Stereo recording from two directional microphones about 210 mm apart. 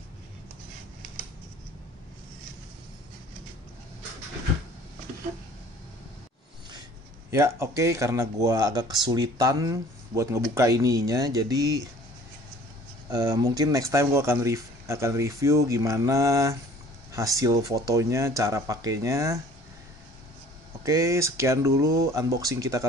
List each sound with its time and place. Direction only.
7.2 s speech: 15° right (ahead or behind)
13.1 s speech: 20° right (ahead or behind)
20.8 s speech: 15° right (ahead or behind)